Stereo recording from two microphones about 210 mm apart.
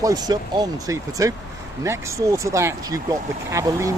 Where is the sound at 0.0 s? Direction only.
15° right (ahead or behind).